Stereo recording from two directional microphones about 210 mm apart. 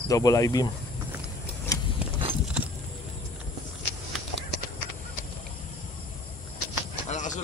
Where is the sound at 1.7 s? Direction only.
15° left (ahead or behind).